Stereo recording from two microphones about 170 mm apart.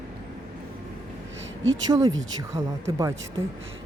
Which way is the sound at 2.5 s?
20° right (ahead or behind).